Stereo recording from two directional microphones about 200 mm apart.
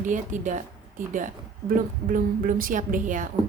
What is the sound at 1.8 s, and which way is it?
A woman's voice, 45° right (ahead or behind).